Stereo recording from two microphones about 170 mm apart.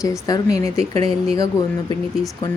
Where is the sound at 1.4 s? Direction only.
20° left (ahead or behind).